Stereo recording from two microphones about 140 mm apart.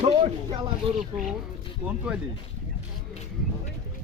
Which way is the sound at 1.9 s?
10° right (ahead or behind).